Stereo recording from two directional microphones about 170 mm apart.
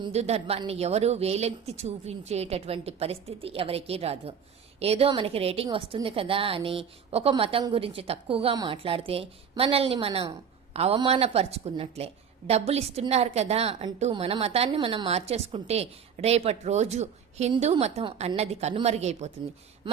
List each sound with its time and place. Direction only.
0.0 s a woman's voice: 40° right (ahead or behind)